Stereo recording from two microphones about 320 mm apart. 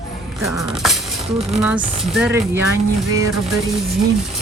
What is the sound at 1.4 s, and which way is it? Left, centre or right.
Speech, centre.